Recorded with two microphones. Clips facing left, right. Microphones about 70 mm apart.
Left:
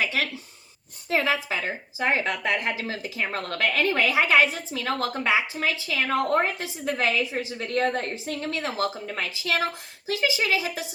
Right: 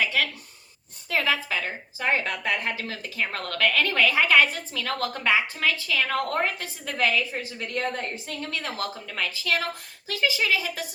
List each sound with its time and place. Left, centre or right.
0.0 s a sound: left
1.1 s a woman's voice: left
7.3 s a woman's voice: left
8.4 s a woman's voice: left